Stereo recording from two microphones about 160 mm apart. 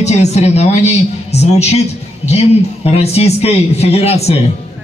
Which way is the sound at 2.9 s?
40° left (ahead or behind).